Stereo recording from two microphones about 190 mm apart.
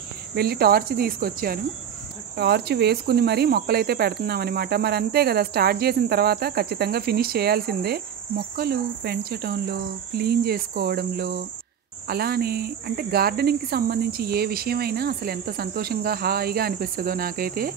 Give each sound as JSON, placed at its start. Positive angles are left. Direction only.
{"t": 0.3, "sound": "speech", "side_deg": -55}